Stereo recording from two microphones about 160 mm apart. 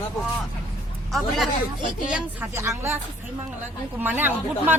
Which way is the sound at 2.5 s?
15° right (ahead or behind).